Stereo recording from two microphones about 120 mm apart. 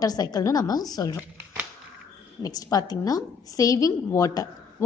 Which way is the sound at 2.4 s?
35° left (ahead or behind).